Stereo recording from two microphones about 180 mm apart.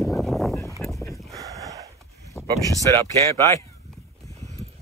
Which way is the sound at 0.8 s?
15° left (ahead or behind).